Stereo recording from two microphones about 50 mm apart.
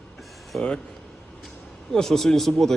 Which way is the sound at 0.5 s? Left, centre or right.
Centre.